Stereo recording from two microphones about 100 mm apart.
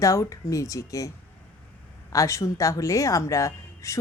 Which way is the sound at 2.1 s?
30° left (ahead or behind).